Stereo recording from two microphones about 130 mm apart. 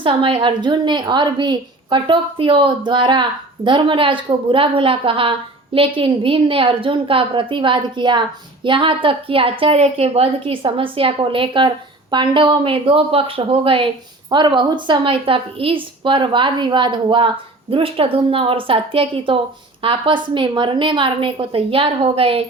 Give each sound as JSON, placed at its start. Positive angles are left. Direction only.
{"t": 0.0, "sound": "a woman's voice", "side_deg": -40}